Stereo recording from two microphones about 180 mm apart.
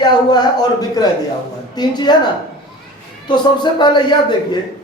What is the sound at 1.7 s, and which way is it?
Speech, 25° left (ahead or behind).